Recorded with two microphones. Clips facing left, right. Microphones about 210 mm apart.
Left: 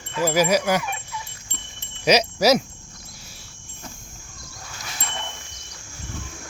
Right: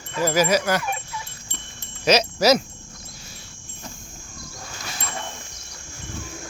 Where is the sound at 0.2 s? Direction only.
10° left (ahead or behind).